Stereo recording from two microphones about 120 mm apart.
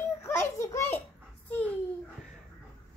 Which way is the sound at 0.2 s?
25° left (ahead or behind).